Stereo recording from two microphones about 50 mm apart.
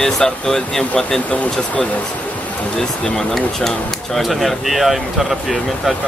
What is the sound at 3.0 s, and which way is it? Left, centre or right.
Speech, centre.